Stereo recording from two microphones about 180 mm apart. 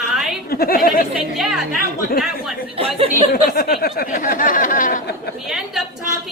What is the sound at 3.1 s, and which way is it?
Speech, 55° left (ahead or behind).